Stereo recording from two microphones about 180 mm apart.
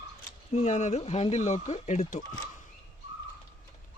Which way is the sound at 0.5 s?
40° left (ahead or behind).